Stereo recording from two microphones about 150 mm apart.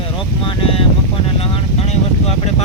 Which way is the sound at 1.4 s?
40° left (ahead or behind).